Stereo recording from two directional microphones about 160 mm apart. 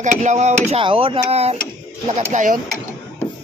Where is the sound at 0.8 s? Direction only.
35° right (ahead or behind).